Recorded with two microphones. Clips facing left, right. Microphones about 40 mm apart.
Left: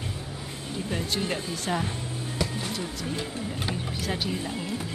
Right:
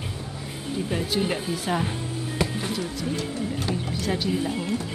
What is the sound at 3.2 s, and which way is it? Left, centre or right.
Music, left.